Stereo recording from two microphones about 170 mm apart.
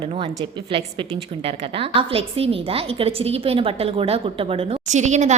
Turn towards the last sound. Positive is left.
turn(degrees=-45)  # may be behind; listen again after turning